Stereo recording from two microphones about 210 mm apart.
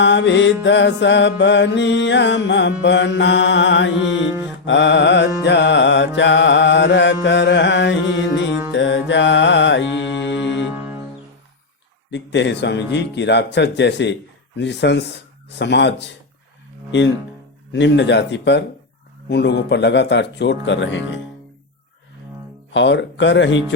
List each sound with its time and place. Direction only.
0.0 s speech: 55° left (ahead or behind)
8.7 s music: 60° left (ahead or behind)
10.8 s music: 10° right (ahead or behind)
12.1 s speech: 55° left (ahead or behind)
17.7 s speech: 55° left (ahead or behind)
22.7 s speech: 60° left (ahead or behind)